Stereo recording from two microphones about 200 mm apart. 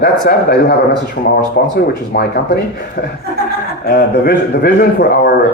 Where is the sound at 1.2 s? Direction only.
40° left (ahead or behind).